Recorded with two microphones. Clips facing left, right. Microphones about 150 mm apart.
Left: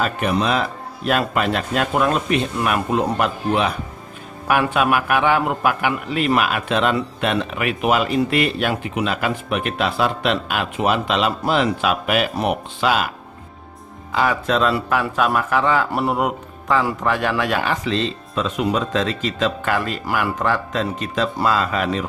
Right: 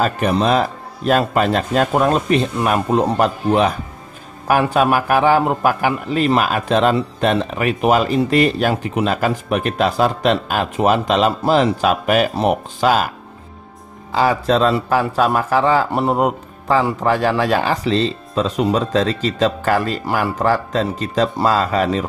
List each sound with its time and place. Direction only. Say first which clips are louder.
0.0 s a man's voice: right 3 dB; 35° right (ahead or behind)
14.1 s a man's voice: right 4 dB; 35° right (ahead or behind)